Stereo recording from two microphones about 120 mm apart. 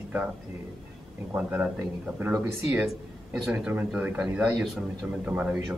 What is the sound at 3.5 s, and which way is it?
A man's voice, 15° right (ahead or behind).